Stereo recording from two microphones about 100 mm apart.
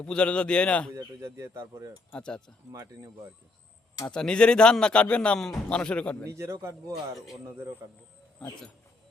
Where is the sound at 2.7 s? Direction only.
35° right (ahead or behind).